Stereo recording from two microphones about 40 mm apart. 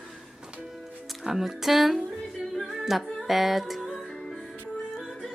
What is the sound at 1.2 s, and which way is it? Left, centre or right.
Music, centre.